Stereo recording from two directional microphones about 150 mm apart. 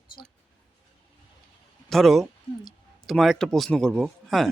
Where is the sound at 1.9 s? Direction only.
Centre (ahead or behind).